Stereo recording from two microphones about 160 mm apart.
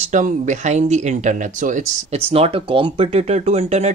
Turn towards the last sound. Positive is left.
turn(degrees=-45)  # may be behind; listen again after turning